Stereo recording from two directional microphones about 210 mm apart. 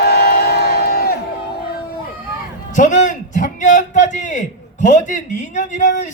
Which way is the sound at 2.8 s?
35° left (ahead or behind).